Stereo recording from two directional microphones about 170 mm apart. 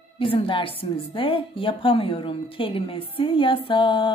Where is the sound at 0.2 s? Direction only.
30° left (ahead or behind).